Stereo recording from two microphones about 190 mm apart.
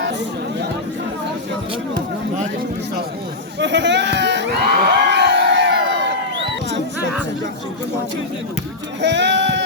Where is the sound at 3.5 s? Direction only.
70° right (ahead or behind).